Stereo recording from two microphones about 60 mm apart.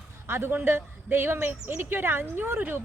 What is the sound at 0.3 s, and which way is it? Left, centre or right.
Speech, right.